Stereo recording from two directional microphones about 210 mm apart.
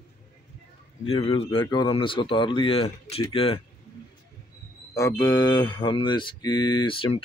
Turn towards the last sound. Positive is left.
turn(degrees=25)  # may be behind; listen again after turning